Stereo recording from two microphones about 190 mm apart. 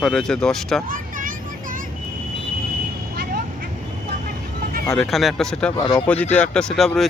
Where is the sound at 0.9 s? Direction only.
45° right (ahead or behind).